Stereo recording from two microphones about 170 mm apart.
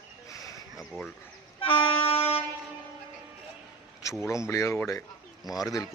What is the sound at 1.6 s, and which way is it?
Music, 30° left (ahead or behind).